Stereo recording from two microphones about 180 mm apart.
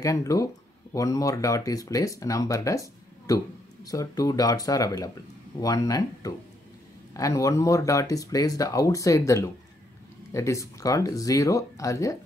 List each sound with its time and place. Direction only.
0.0 s speech: 15° left (ahead or behind)